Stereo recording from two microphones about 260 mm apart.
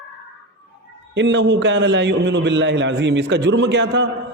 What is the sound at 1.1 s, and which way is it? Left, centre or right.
A man's voice, right.